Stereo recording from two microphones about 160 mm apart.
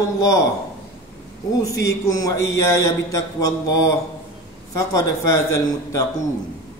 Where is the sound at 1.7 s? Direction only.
20° left (ahead or behind).